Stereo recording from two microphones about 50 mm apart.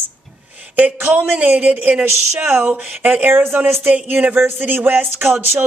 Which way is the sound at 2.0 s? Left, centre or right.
Right.